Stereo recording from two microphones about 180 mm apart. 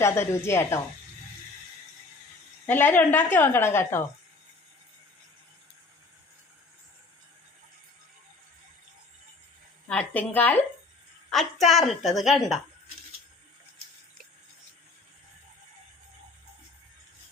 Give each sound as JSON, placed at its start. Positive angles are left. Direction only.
{"t": 0.0, "sound": "a woman's voice", "side_deg": 15}
{"t": 2.6, "sound": "a woman's voice", "side_deg": 10}
{"t": 9.9, "sound": "a woman's voice", "side_deg": 5}